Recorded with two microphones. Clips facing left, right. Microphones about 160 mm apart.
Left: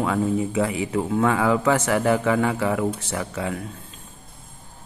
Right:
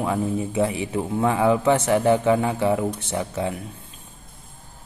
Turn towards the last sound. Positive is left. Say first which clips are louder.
# right 2 dB
turn(degrees=-25)  # may be behind; listen again after turning